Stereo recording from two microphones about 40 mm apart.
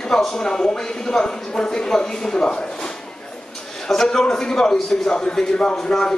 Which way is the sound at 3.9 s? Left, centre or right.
Centre.